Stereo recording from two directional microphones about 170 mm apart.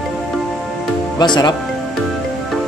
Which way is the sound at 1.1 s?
25° left (ahead or behind).